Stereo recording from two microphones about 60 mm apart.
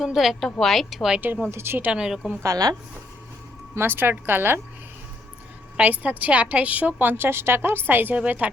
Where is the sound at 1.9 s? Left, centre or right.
Centre.